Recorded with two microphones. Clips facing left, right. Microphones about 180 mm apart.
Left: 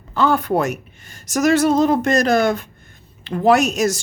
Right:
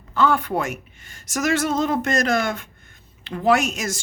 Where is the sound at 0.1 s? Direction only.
35° left (ahead or behind).